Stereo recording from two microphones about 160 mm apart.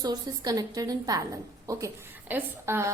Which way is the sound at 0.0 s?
25° right (ahead or behind).